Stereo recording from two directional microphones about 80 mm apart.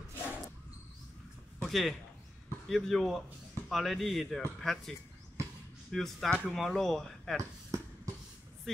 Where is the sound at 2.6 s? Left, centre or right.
Centre.